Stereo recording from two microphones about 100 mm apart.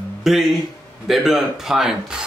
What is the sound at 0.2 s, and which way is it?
Speech, centre (ahead or behind).